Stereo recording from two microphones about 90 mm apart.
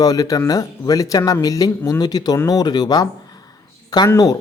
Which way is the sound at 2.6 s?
50° left (ahead or behind).